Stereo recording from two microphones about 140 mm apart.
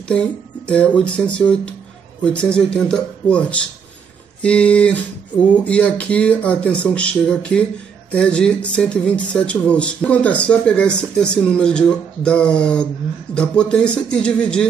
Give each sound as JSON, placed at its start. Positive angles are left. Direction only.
{"t": 0.1, "sound": "speech", "side_deg": 10}